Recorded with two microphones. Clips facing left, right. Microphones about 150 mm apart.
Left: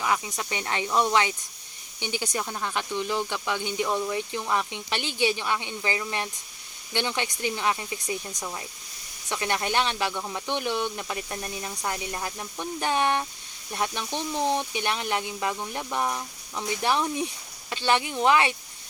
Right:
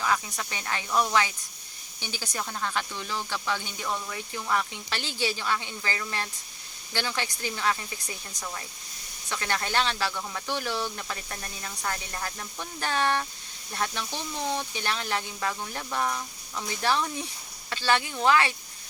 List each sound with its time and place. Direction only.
0.0 s speech: 15° left (ahead or behind)